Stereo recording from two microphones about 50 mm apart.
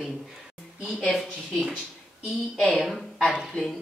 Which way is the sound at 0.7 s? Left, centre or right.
Centre.